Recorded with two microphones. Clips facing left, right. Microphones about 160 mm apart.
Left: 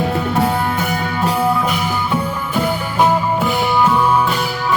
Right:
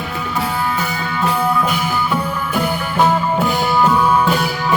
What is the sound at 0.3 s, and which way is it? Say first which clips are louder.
Music: even; 55° left (ahead or behind).